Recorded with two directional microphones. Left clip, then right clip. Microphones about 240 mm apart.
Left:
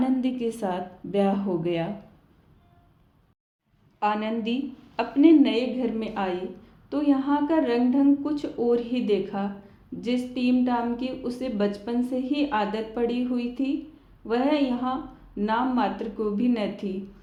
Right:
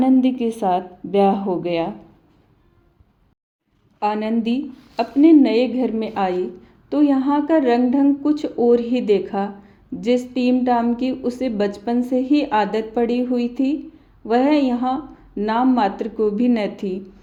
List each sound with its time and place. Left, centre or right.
0.0 s a woman's voice: right
4.0 s a woman's voice: right